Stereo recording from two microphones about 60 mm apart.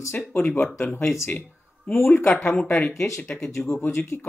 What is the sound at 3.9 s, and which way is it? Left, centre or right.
Speech, left.